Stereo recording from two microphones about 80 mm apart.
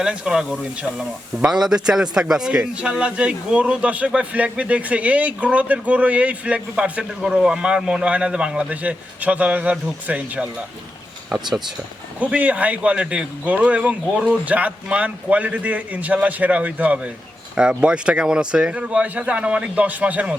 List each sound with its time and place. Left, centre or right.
0.0 s a man's voice: centre
1.5 s a man's voice: centre
12.2 s a man's voice: centre